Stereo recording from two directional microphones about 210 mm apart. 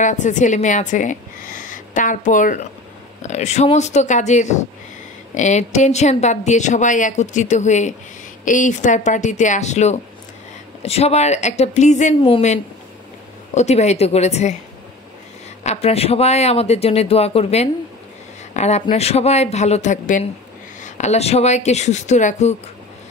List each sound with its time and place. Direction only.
0.0 s a woman's voice: 35° left (ahead or behind)
13.6 s a woman's voice: 30° left (ahead or behind)
15.6 s a woman's voice: 30° left (ahead or behind)